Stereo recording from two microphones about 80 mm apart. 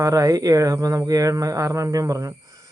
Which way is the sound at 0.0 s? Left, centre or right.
Right.